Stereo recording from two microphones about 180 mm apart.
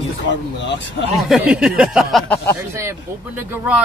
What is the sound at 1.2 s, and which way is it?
Speech, 5° right (ahead or behind).